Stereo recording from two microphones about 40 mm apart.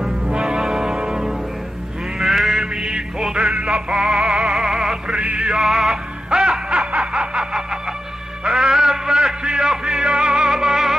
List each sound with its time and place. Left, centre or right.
0.6 s music: centre
2.1 s sheep: centre
2.6 s music: centre
5.0 s music: right
5.6 s music: centre
6.9 s snicker: right
8.5 s music: centre